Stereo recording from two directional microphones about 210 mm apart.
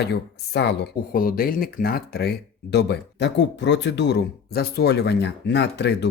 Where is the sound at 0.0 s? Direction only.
50° left (ahead or behind).